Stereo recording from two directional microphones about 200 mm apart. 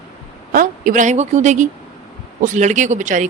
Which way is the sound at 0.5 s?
40° right (ahead or behind).